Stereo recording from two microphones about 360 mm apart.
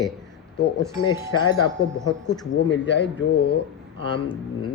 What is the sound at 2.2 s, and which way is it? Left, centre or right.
Speech, centre.